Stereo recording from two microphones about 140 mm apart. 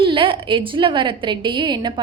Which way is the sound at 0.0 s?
35° right (ahead or behind).